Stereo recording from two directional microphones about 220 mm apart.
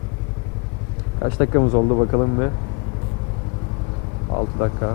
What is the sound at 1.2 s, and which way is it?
Speech, 20° left (ahead or behind).